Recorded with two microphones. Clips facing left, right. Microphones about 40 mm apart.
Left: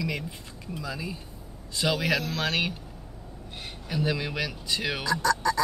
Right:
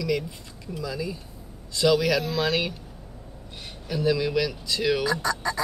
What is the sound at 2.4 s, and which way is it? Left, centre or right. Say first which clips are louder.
Speech: right 2 dB; centre.